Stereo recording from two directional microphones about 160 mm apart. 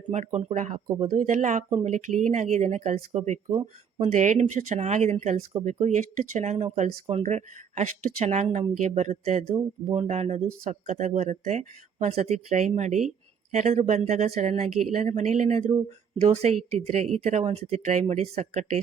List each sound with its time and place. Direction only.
0.1 s speech: 45° right (ahead or behind)
3.4 s speech: 20° right (ahead or behind)
3.9 s speech: 40° right (ahead or behind)